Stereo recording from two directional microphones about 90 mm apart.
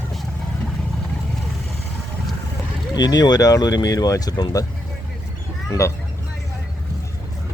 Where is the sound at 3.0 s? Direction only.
50° left (ahead or behind).